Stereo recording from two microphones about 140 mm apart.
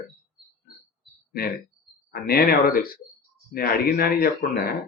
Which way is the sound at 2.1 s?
90° left.